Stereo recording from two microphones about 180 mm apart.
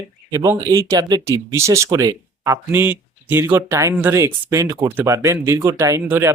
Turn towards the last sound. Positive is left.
turn(degrees=-10)  # may be behind; listen again after turning